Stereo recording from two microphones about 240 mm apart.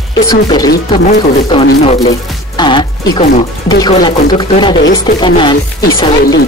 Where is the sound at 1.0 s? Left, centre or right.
Left.